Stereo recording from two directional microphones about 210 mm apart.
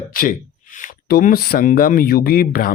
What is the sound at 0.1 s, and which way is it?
Speech, 40° left (ahead or behind).